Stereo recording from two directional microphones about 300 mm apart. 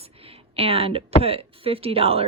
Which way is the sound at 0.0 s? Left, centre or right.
Centre.